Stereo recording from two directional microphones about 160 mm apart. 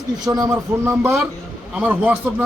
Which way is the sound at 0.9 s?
5° right (ahead or behind).